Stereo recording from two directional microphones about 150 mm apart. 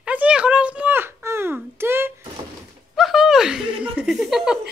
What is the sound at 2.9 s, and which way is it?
Laughter, centre (ahead or behind).